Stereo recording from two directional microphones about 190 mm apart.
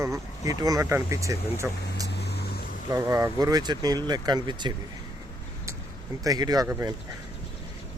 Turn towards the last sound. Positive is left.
turn(degrees=-15)  # may be behind; listen again after turning